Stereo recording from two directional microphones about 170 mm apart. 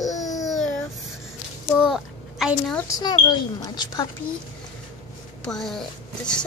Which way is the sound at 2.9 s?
25° left (ahead or behind).